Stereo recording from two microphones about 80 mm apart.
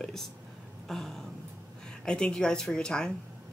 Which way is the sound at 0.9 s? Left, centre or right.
Centre.